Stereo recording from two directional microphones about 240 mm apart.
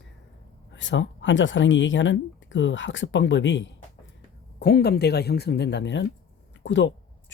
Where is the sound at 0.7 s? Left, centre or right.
Left.